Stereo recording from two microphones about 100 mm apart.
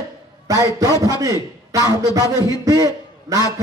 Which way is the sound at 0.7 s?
35° right (ahead or behind).